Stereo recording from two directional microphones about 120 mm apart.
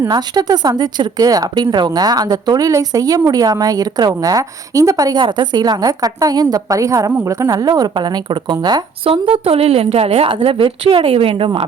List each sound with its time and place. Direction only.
0.1 s a woman's voice: 35° right (ahead or behind)
9.0 s a woman's voice: 50° right (ahead or behind)